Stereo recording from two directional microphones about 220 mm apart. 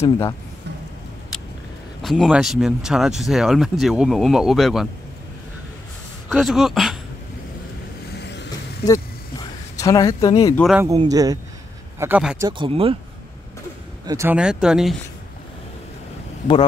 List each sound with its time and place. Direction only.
2.0 s speech: centre (ahead or behind)
6.2 s speech: centre (ahead or behind)
8.2 s a sound: 50° left (ahead or behind)
8.8 s a sound: 15° left (ahead or behind)
10.6 s speech: 5° right (ahead or behind)
10.9 s speech: 15° right (ahead or behind)
12.0 s speech: 5° right (ahead or behind)
12.4 s speech: 20° right (ahead or behind)
14.0 s speech: 15° right (ahead or behind)